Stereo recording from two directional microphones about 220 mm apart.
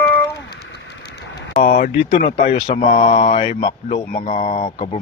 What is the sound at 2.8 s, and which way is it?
Mantra, 35° left (ahead or behind).